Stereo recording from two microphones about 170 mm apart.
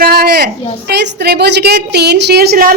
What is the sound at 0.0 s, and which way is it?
A woman's voice, 65° right (ahead or behind).